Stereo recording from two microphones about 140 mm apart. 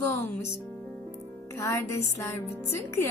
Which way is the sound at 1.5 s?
20° left (ahead or behind).